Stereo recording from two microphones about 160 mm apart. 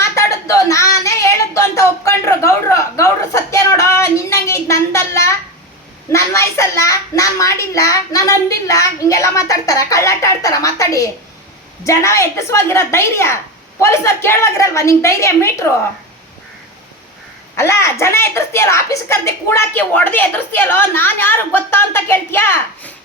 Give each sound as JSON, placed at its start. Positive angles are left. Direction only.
{"t": 0.0, "sound": "child singing", "side_deg": 20}
{"t": 6.1, "sound": "a child's voice", "side_deg": 15}
{"t": 17.6, "sound": "a woman's voice", "side_deg": 15}